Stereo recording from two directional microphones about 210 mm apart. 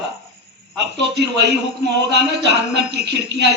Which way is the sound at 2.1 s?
55° right (ahead or behind).